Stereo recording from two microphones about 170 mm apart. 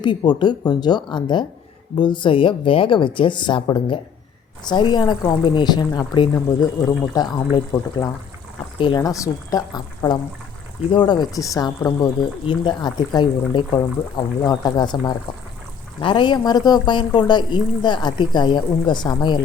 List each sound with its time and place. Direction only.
0.0 s speech: 25° left (ahead or behind)